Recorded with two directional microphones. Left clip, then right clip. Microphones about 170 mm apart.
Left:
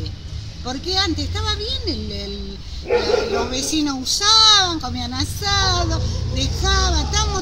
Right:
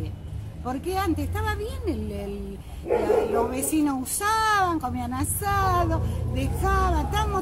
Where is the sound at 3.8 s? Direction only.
5° right (ahead or behind).